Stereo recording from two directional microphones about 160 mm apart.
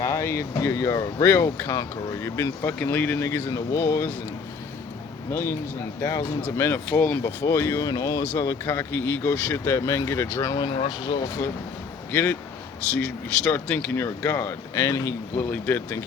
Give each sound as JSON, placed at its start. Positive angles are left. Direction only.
{"t": 0.0, "sound": "speech", "side_deg": 15}
{"t": 5.3, "sound": "speech", "side_deg": 15}
{"t": 12.1, "sound": "speech", "side_deg": 10}